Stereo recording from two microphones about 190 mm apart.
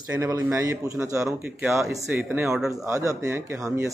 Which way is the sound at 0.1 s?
20° right (ahead or behind).